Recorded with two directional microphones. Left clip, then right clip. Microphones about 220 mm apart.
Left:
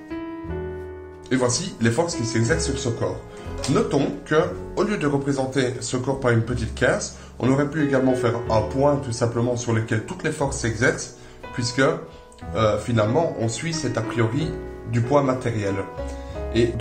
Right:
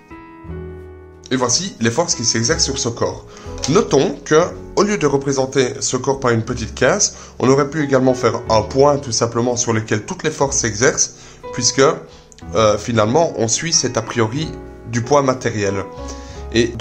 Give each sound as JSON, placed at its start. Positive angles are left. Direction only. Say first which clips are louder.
{"t": 1.3, "sound": "speech", "louder": "right 4 dB", "side_deg": -30}